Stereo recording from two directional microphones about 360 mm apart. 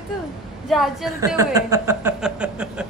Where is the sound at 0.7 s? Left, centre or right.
Centre.